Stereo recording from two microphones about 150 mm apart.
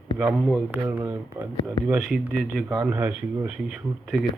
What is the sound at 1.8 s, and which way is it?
Mantra, 5° right (ahead or behind).